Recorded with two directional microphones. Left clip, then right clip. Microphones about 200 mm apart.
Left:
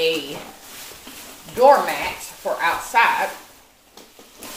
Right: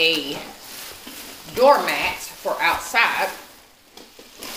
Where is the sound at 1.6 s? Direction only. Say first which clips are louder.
Left 1 dB; 15° right (ahead or behind).